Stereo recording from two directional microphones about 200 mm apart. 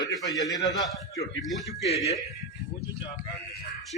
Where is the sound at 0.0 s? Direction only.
20° left (ahead or behind).